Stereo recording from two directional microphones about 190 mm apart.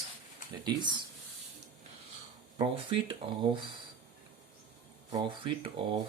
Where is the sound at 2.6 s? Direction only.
25° right (ahead or behind).